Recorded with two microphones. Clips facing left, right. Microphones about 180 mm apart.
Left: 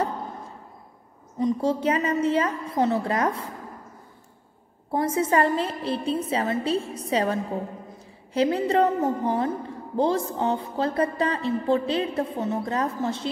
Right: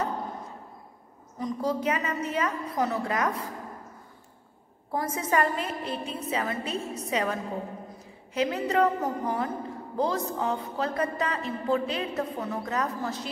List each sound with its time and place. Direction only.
1.4 s a woman's voice: 25° left (ahead or behind)
4.9 s a woman's voice: 30° left (ahead or behind)